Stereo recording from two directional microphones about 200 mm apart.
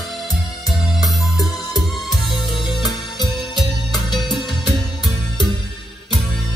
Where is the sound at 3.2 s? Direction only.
Centre (ahead or behind).